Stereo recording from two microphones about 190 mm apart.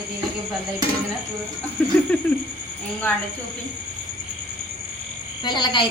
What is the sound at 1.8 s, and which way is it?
Speech, 10° left (ahead or behind).